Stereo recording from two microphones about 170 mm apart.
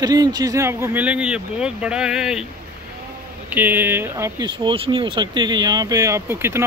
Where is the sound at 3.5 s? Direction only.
10° right (ahead or behind).